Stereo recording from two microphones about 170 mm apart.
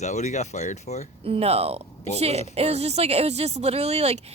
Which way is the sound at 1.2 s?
35° right (ahead or behind).